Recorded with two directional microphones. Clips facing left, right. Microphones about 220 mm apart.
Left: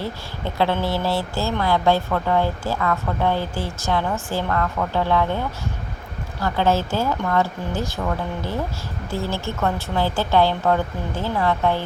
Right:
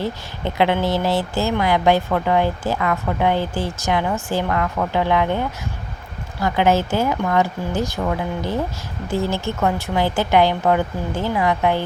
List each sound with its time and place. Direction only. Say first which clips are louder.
0.0 s speech: right 3 dB; 20° right (ahead or behind)